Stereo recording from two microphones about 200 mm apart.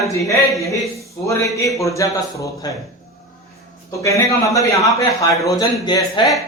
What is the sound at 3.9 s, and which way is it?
A man's voice, 15° left (ahead or behind).